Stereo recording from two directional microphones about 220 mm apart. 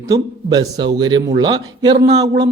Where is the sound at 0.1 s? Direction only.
15° right (ahead or behind).